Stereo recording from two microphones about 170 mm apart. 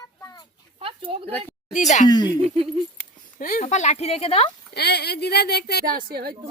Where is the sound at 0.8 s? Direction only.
30° right (ahead or behind).